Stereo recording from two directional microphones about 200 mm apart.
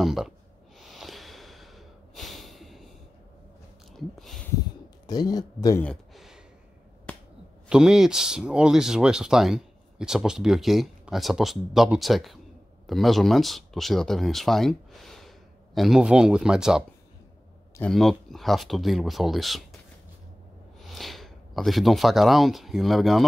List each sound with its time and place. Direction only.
0.0 s speech: centre (ahead or behind)
0.7 s snort: centre (ahead or behind)
3.9 s a sound: centre (ahead or behind)
5.0 s speech: 20° left (ahead or behind)
5.8 s a sound: 5° left (ahead or behind)
7.7 s speech: 5° right (ahead or behind)
20.8 s speech: centre (ahead or behind)